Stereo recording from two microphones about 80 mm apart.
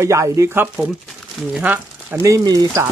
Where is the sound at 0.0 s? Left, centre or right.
Right.